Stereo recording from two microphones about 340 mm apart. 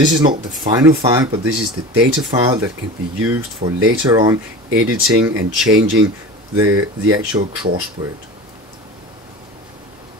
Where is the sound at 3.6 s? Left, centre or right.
Right.